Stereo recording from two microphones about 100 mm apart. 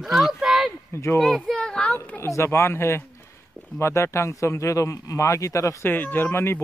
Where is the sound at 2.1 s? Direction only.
30° left (ahead or behind).